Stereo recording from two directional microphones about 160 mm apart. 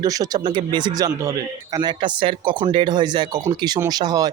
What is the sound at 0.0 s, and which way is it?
Speech, 20° right (ahead or behind).